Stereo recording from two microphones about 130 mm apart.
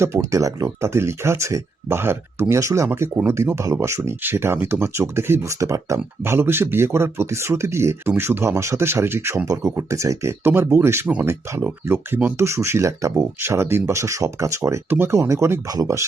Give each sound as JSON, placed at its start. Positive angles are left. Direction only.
{"t": 0.0, "sound": "speech", "side_deg": -20}